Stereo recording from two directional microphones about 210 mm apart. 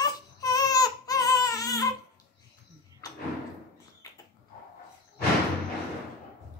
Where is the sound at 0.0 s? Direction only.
15° left (ahead or behind).